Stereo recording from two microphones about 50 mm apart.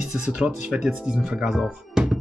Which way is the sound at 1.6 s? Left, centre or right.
Centre.